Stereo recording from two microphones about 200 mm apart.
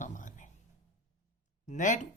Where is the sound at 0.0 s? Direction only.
40° left (ahead or behind).